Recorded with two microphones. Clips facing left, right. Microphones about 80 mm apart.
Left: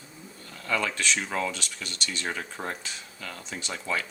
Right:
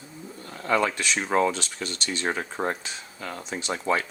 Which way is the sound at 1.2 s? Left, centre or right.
Right.